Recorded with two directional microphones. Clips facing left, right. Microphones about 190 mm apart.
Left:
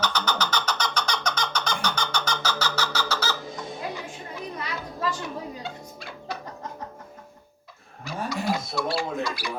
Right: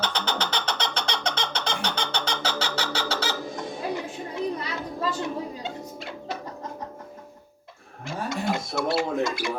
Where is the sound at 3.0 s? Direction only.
30° right (ahead or behind).